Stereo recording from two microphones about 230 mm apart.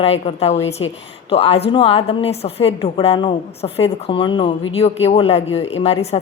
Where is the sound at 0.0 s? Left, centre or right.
Left.